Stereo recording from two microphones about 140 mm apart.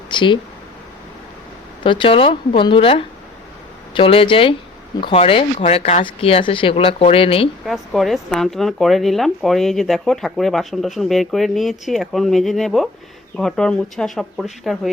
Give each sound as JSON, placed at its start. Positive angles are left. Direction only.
{"t": 0.1, "sound": "speech", "side_deg": 35}
{"t": 1.8, "sound": "a woman's voice", "side_deg": 35}
{"t": 7.6, "sound": "speech", "side_deg": 0}